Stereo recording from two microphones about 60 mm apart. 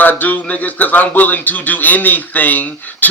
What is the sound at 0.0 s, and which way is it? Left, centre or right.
A man's voice, left.